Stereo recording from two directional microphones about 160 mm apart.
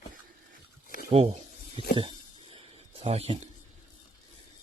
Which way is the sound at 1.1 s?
40° right (ahead or behind).